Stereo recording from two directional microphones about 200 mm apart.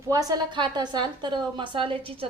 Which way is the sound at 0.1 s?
20° right (ahead or behind).